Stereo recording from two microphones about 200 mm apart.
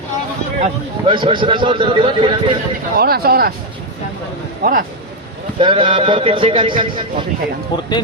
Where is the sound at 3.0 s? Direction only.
50° right (ahead or behind).